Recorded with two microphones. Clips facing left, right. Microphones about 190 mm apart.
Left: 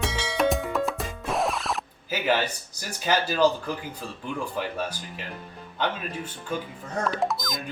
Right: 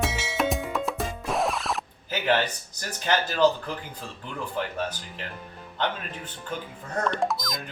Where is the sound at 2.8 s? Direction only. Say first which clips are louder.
Left 1 dB; 10° left (ahead or behind).